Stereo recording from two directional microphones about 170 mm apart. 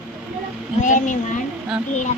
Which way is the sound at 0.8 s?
50° left (ahead or behind).